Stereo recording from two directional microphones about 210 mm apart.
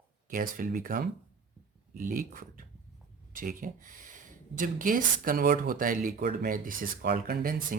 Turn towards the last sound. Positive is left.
turn(degrees=-45)  # may be behind; listen again after turning